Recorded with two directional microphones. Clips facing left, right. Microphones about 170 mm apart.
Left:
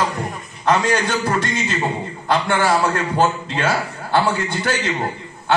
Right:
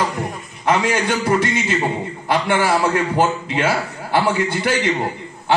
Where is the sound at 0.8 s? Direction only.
10° right (ahead or behind).